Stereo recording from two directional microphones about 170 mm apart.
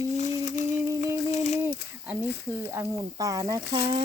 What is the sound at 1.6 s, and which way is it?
Speech, 10° right (ahead or behind).